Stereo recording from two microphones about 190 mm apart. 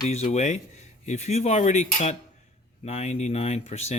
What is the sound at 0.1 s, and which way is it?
Speech, 35° left (ahead or behind).